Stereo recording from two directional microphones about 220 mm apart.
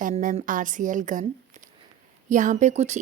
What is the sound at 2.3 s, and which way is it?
Speech, 35° right (ahead or behind).